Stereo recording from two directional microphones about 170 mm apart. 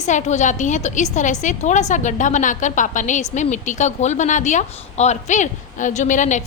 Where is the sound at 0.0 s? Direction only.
45° left (ahead or behind).